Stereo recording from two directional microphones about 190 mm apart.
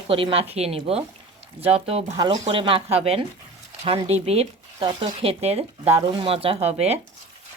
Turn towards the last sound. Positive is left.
turn(degrees=-35)  # may be behind; listen again after turning